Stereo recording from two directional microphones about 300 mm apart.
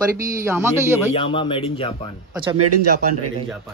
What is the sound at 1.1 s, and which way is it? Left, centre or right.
Speech, centre.